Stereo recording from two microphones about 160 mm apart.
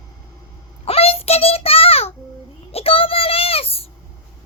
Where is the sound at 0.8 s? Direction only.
40° left (ahead or behind).